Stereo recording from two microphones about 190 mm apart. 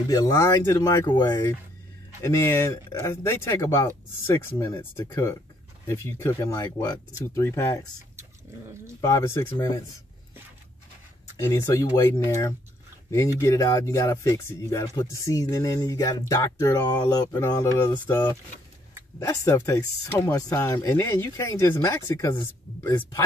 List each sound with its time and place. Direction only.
0.1 s speech: 15° left (ahead or behind)
9.0 s speech: 15° left (ahead or behind)
11.3 s speech: 15° left (ahead or behind)